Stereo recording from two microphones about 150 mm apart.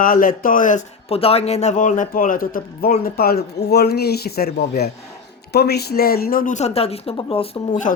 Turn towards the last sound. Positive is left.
turn(degrees=35)  # may be behind; listen again after turning